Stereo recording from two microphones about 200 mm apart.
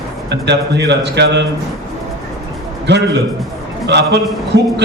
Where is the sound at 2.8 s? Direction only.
60° right (ahead or behind).